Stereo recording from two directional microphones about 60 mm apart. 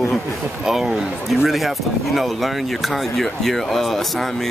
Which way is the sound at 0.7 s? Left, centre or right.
Centre.